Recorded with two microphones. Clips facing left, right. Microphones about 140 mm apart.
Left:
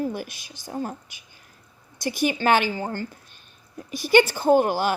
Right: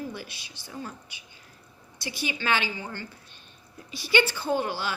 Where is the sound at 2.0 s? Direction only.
45° left (ahead or behind).